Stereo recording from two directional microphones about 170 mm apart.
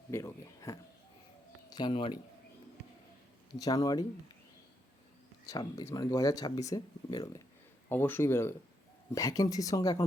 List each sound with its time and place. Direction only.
0.1 s speech: 15° left (ahead or behind)
3.5 s speech: 20° left (ahead or behind)
5.5 s speech: 20° left (ahead or behind)
7.9 s speech: 10° left (ahead or behind)